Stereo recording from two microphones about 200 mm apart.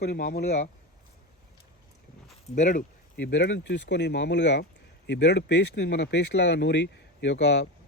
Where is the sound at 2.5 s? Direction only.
40° left (ahead or behind).